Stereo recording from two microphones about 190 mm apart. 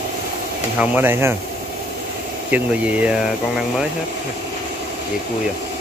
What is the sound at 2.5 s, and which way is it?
Speech, 5° right (ahead or behind).